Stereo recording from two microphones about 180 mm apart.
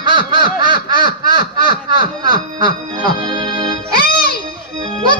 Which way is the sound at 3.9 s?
55° left (ahead or behind).